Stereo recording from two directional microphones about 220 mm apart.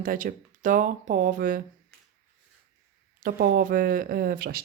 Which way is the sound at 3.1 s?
40° right (ahead or behind).